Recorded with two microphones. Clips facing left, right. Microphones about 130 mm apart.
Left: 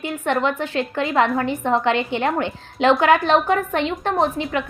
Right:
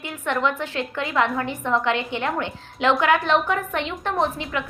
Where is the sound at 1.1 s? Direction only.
50° left (ahead or behind).